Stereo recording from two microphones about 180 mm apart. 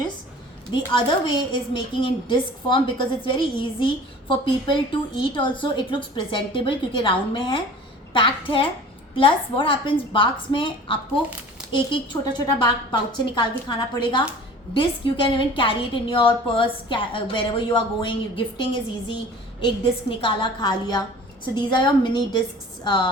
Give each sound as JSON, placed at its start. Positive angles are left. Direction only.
{"t": 1.7, "sound": "a woman's voice", "side_deg": 25}